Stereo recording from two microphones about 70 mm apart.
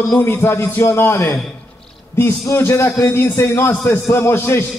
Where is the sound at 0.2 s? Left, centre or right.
Left.